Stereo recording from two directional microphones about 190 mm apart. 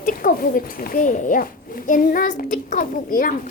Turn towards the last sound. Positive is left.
turn(degrees=45)  # may be behind; listen again after turning